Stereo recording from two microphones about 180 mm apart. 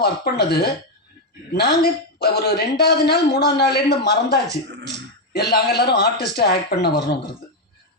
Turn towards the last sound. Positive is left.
turn(degrees=60)  # may be behind; listen again after turning